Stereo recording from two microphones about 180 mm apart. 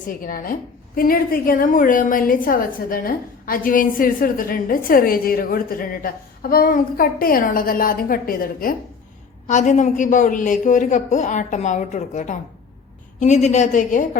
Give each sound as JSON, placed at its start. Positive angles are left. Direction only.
{"t": 0.3, "sound": "a woman's voice", "side_deg": 50}
{"t": 9.5, "sound": "a woman's voice", "side_deg": 40}